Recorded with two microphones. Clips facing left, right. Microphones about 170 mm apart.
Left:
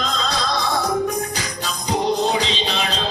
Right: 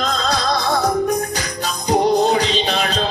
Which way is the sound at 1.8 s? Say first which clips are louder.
Right 5 dB; 50° right (ahead or behind).